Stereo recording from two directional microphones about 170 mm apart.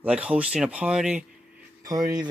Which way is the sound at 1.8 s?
20° right (ahead or behind).